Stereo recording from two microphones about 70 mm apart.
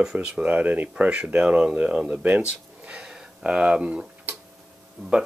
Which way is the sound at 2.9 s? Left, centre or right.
Centre.